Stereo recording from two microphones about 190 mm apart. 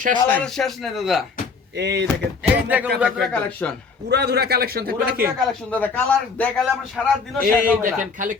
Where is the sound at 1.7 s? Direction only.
65° right (ahead or behind).